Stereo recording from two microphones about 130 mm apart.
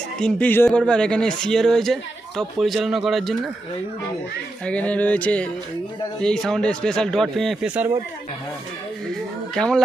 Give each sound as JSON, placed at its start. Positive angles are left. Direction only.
{"t": 0.2, "sound": "speech", "side_deg": 10}
{"t": 4.6, "sound": "speech", "side_deg": 10}
{"t": 9.6, "sound": "speech", "side_deg": 5}